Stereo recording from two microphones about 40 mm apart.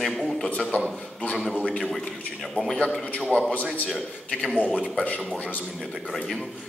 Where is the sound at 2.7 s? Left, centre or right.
Centre.